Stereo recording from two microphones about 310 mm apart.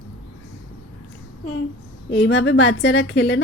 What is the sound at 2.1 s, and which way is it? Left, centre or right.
A woman's voice, left.